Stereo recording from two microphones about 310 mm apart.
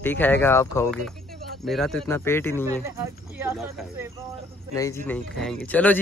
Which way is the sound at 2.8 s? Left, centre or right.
Centre.